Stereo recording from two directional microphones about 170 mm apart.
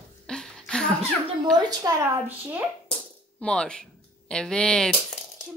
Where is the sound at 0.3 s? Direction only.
5° left (ahead or behind).